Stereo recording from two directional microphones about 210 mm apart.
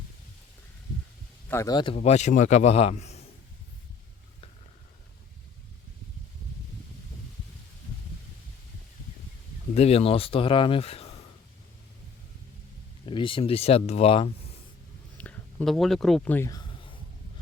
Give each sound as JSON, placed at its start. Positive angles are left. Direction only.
{"t": 1.5, "sound": "speech", "side_deg": 15}
{"t": 2.0, "sound": "a man's voice", "side_deg": 35}
{"t": 9.7, "sound": "speech", "side_deg": 30}
{"t": 13.1, "sound": "speech", "side_deg": 25}
{"t": 15.2, "sound": "a sound", "side_deg": 5}